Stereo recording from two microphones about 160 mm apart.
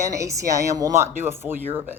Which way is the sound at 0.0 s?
20° right (ahead or behind).